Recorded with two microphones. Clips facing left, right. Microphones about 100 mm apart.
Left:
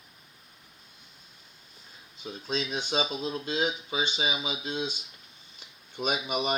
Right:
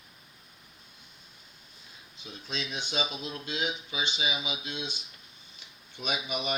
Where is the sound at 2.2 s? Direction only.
40° left (ahead or behind).